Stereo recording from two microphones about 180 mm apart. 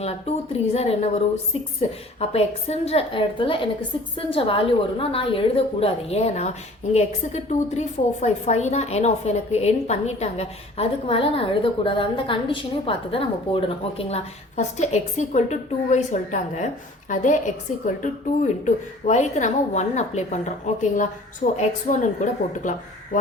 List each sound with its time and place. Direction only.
0.0 s a woman's voice: 35° left (ahead or behind)